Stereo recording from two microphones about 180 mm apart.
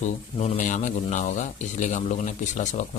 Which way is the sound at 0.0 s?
40° left (ahead or behind).